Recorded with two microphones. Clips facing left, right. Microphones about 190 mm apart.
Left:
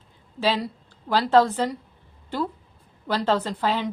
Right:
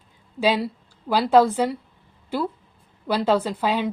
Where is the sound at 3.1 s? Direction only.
10° right (ahead or behind).